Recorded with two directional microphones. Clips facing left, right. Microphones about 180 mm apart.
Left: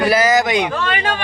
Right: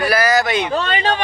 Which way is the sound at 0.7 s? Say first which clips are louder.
Right 2 dB; 30° right (ahead or behind).